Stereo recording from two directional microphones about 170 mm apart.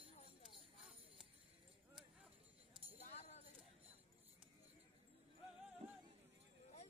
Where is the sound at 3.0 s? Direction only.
40° left (ahead or behind).